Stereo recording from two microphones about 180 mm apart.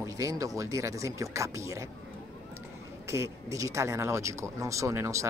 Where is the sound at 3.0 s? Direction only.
15° right (ahead or behind).